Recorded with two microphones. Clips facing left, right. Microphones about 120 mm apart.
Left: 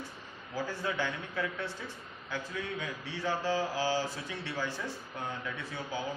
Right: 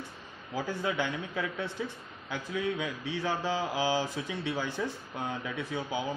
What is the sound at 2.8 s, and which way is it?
A man's voice, 15° right (ahead or behind).